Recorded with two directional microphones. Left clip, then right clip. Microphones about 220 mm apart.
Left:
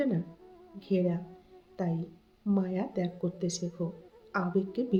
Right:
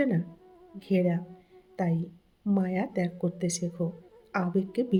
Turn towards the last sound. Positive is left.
turn(degrees=-35)  # may be behind; listen again after turning